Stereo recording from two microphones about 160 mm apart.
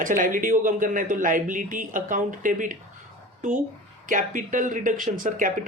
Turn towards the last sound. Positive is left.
turn(degrees=-55)  # may be behind; listen again after turning